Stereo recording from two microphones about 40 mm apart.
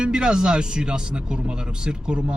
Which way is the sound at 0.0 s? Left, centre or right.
Right.